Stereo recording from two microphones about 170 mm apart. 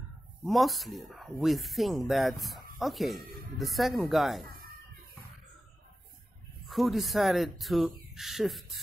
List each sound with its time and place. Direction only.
0.5 s speech: centre (ahead or behind)
4.5 s chicken: 60° right (ahead or behind)
6.7 s speech: centre (ahead or behind)